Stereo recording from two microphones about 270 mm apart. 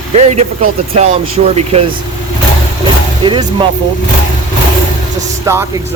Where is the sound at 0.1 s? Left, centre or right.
Right.